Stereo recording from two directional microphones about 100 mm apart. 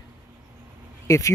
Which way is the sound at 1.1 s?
35° left (ahead or behind).